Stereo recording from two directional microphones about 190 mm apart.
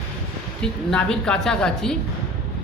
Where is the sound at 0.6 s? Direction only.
5° left (ahead or behind).